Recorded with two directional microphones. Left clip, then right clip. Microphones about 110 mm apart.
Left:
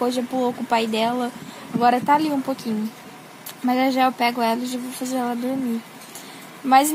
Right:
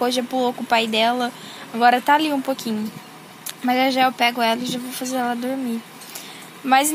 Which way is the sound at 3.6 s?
20° left (ahead or behind).